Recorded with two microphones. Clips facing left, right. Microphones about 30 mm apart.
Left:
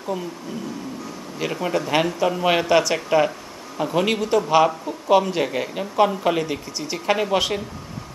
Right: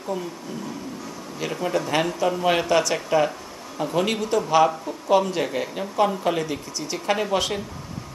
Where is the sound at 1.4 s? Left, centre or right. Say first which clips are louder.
Left 1 dB; centre.